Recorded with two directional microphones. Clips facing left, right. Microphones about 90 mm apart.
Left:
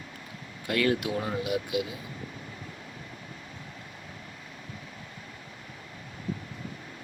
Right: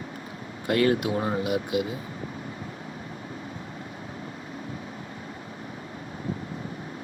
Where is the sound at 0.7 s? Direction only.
35° right (ahead or behind).